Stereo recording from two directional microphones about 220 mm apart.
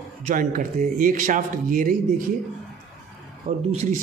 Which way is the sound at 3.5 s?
35° right (ahead or behind).